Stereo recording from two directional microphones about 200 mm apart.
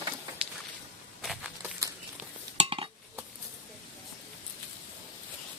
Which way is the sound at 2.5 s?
25° right (ahead or behind).